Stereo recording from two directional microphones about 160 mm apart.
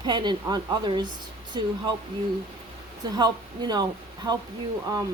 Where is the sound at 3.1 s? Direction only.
25° right (ahead or behind).